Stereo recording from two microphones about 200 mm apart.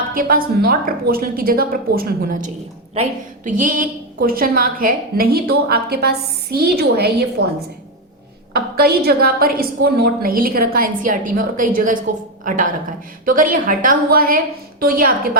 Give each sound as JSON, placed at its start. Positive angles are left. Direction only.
{"t": 0.1, "sound": "a woman's voice", "side_deg": -45}
{"t": 8.5, "sound": "a woman's voice", "side_deg": -50}